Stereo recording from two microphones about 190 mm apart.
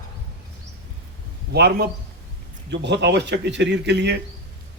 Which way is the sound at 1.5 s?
60° right (ahead or behind).